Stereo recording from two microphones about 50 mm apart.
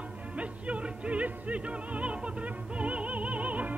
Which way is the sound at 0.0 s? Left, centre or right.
Right.